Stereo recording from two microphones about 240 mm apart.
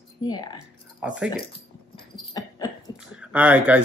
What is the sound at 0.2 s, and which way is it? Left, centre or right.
Speech, centre.